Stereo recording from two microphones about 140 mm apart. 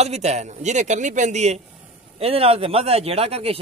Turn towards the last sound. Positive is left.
turn(degrees=-45)  # may be behind; listen again after turning